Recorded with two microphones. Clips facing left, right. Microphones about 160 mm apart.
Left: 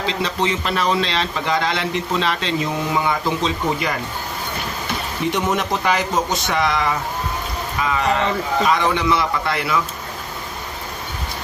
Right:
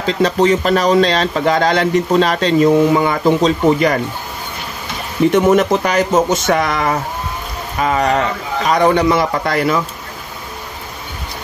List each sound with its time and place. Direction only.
0.0 s speech: 45° right (ahead or behind)
5.3 s speech: 50° right (ahead or behind)